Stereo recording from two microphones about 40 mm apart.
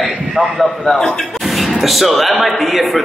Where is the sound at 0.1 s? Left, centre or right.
Centre.